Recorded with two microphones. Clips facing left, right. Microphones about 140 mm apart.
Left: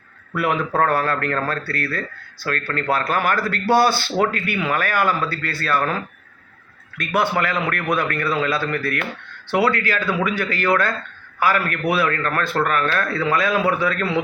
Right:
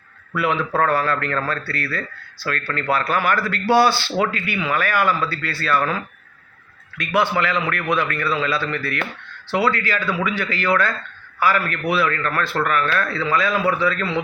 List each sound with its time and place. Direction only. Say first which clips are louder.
0.3 s speech: even; 50° left (ahead or behind)